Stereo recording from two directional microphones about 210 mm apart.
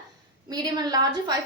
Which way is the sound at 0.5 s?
20° right (ahead or behind).